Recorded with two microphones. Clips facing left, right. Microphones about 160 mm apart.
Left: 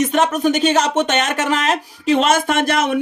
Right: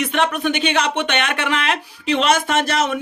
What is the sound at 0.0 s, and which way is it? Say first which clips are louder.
Speech: left 4 dB; 40° left (ahead or behind).